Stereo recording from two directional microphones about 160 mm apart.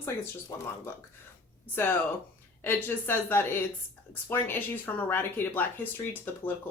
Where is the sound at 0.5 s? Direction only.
20° left (ahead or behind).